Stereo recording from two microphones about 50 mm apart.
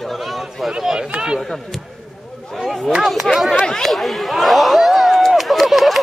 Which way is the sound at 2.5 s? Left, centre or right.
Centre.